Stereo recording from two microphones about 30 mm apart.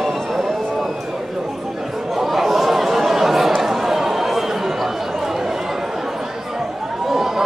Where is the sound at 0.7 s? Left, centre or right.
Centre.